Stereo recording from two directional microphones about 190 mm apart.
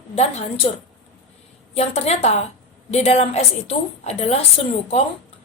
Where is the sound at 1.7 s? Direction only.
35° left (ahead or behind).